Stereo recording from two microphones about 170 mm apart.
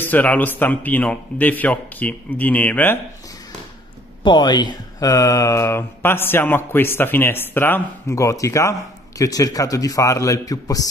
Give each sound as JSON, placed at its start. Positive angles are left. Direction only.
{"t": 0.0, "sound": "speech", "side_deg": 10}
{"t": 4.2, "sound": "a man's voice", "side_deg": 25}